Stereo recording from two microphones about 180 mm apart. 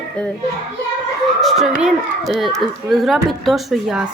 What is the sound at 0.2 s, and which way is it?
Speech, 5° left (ahead or behind).